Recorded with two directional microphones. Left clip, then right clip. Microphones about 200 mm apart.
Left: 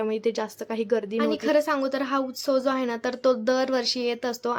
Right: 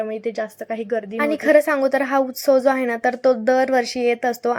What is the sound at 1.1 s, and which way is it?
A woman's voice, 25° right (ahead or behind).